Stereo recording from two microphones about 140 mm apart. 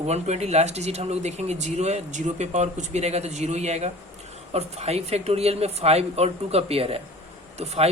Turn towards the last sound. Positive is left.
turn(degrees=-50)  # may be behind; listen again after turning